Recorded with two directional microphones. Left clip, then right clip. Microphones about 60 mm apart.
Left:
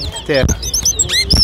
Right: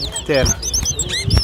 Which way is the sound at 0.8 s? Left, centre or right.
Left.